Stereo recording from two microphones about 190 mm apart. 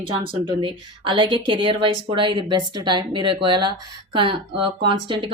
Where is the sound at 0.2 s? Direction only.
25° right (ahead or behind).